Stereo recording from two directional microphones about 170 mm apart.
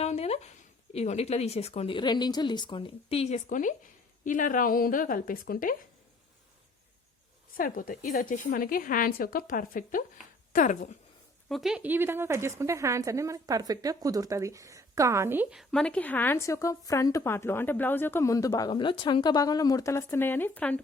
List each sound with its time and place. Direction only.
0.0 s a sound: 40° left (ahead or behind)
0.9 s speech: 40° left (ahead or behind); by 5.7 s 55° left (ahead or behind)
7.5 s a woman's voice: 55° left (ahead or behind)
11.4 s a woman's voice: centre (ahead or behind)